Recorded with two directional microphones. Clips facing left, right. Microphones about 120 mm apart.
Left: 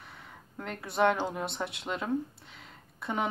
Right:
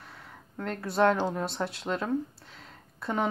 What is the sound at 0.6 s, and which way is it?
A woman's voice, 5° left (ahead or behind).